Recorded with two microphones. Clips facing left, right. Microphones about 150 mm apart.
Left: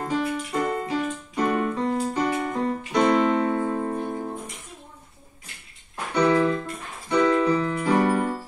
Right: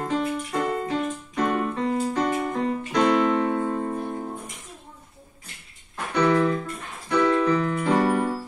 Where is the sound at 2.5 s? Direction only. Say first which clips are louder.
Left 1 dB; centre (ahead or behind).